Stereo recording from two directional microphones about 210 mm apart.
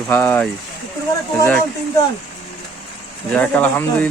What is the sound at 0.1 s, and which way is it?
Speech, 10° left (ahead or behind).